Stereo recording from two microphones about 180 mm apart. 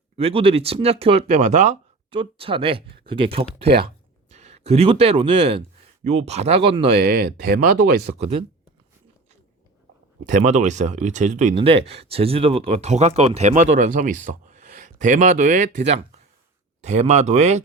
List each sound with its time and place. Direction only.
0.2 s speech: 30° right (ahead or behind)
7.0 s speech: 60° right (ahead or behind)
8.2 s speech: 35° right (ahead or behind)
10.2 s speech: 40° right (ahead or behind)